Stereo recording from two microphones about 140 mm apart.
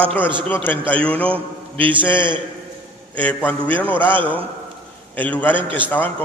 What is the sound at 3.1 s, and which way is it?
Speech, 10° left (ahead or behind).